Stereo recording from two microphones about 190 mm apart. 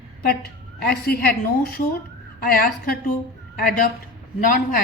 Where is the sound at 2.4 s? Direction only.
50° left (ahead or behind).